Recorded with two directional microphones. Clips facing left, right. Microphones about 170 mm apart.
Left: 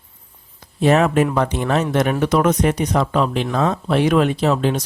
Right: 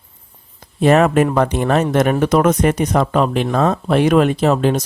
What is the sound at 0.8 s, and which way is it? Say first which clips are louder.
Speech: right 3 dB; 55° right (ahead or behind).